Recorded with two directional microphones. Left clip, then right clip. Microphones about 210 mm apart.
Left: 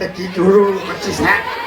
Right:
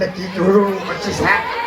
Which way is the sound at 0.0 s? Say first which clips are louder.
Left 2 dB; 35° left (ahead or behind).